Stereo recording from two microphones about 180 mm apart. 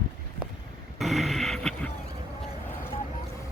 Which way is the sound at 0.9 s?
Centre (ahead or behind).